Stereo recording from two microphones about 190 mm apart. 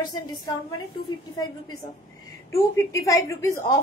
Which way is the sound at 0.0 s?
20° left (ahead or behind).